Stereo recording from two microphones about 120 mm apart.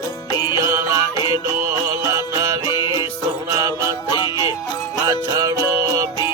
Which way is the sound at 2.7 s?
40° left (ahead or behind).